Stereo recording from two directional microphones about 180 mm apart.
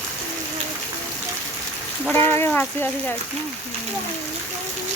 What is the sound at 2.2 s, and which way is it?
Speech, 15° left (ahead or behind).